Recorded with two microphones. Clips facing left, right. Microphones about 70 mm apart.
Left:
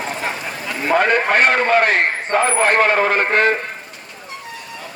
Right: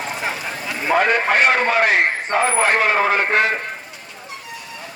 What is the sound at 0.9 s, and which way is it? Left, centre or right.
A man's voice, left.